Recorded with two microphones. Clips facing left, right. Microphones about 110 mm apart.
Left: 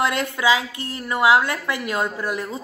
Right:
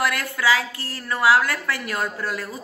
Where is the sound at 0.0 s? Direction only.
20° left (ahead or behind).